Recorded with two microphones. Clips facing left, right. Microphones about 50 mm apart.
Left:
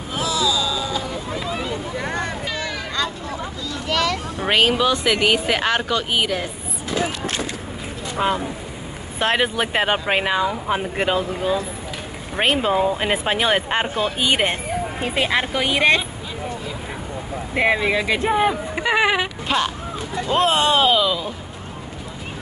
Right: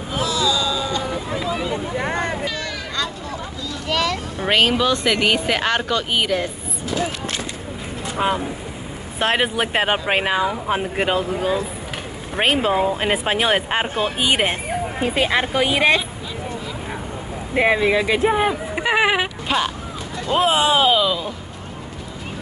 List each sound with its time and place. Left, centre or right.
0.1 s a sound: centre
1.4 s vehicle: centre
2.0 s hubbub: right
2.5 s a sound: centre
3.9 s speech: centre
8.2 s speech: centre
13.8 s speech: right; by 16.0 s centre
17.6 s speech: centre
19.4 s speech: centre